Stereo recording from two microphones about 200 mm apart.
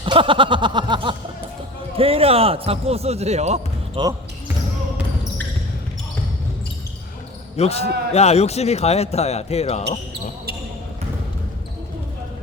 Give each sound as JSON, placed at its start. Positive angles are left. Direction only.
{"t": 0.0, "sound": "a sound", "side_deg": -25}
{"t": 2.0, "sound": "a man's voice", "side_deg": -30}
{"t": 7.5, "sound": "speech", "side_deg": 30}